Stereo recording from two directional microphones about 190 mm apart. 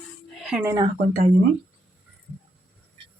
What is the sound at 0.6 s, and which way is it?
Speech, 15° right (ahead or behind).